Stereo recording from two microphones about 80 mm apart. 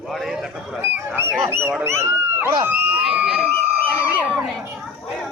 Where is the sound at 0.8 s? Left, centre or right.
Right.